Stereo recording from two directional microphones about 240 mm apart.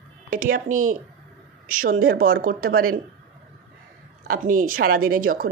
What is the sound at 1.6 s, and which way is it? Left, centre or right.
A woman's voice, right.